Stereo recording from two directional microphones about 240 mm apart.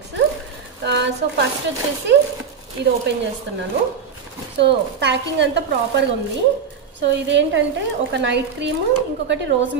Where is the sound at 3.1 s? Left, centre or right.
Right.